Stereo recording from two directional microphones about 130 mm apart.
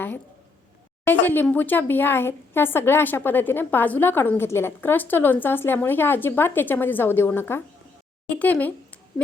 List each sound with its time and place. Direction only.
1.0 s speech: 15° left (ahead or behind)